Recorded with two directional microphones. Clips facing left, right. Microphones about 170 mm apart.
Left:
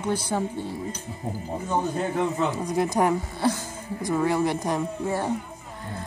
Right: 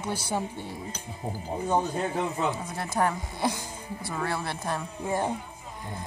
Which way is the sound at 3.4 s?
15° right (ahead or behind).